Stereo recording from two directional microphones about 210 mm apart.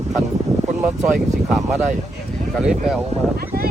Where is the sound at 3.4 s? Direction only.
45° right (ahead or behind).